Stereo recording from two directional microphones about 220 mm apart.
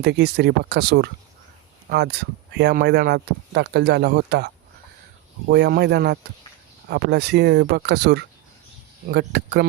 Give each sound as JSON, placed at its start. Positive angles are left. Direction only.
{"t": 0.0, "sound": "speech", "side_deg": -50}